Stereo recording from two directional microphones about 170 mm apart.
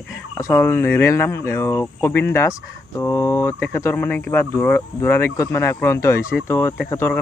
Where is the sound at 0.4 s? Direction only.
15° left (ahead or behind).